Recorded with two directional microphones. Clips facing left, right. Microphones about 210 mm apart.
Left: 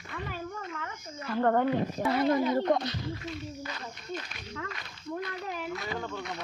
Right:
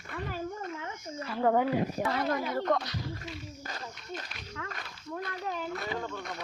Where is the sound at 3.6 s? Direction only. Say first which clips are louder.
Left 2 dB; 45° right (ahead or behind).